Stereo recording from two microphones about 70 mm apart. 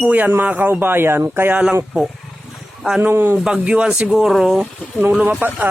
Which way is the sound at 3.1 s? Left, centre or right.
Right.